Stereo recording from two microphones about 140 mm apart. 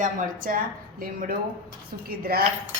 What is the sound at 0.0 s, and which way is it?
A woman's voice, 80° right.